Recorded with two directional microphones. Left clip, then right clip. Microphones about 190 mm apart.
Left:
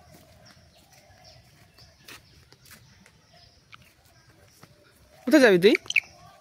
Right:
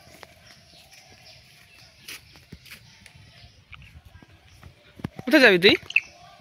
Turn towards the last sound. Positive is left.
turn(degrees=25)  # may be behind; listen again after turning